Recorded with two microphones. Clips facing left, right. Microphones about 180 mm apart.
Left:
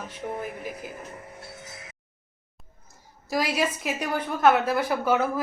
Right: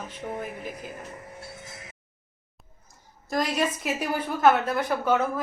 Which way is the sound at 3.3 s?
5° left (ahead or behind).